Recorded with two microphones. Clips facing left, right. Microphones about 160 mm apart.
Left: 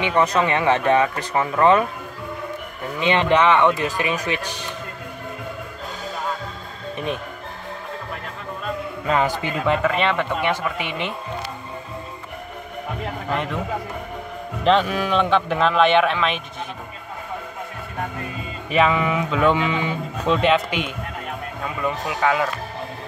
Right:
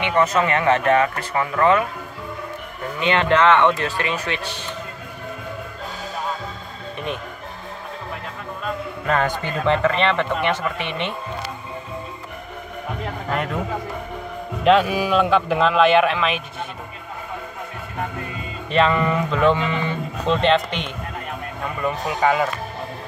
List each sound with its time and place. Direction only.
0.1 s speech: 15° left (ahead or behind)
3.0 s speech: 15° left (ahead or behind)
9.0 s speech: 15° left (ahead or behind)
14.6 s a man's voice: 5° right (ahead or behind)
18.7 s speech: 5° left (ahead or behind)
22.0 s a man's voice: centre (ahead or behind)